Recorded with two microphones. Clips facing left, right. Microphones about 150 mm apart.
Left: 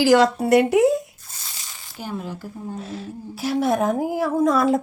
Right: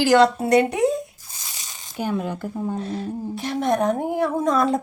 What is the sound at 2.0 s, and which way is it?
Speech, 60° right (ahead or behind).